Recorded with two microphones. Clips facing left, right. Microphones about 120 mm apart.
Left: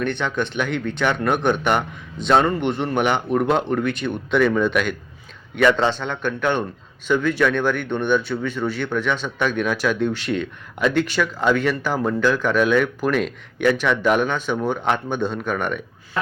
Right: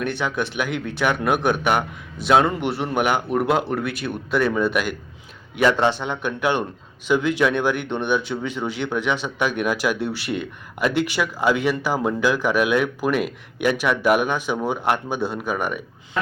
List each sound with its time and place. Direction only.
0.0 s a man's voice: 10° right (ahead or behind)